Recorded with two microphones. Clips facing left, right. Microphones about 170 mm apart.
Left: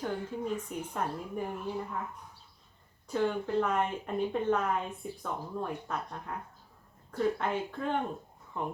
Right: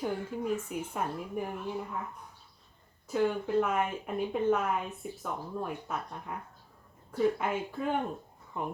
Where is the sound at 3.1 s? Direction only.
5° right (ahead or behind).